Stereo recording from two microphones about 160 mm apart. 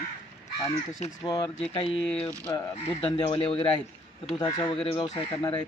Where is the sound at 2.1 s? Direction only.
5° left (ahead or behind).